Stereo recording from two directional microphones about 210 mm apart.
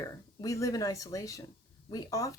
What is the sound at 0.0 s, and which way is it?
Speech, 15° left (ahead or behind).